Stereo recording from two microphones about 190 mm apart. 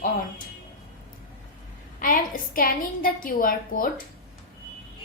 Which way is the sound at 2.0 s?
45° left (ahead or behind).